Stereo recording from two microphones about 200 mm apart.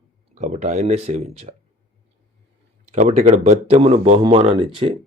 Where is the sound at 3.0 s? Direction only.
35° right (ahead or behind).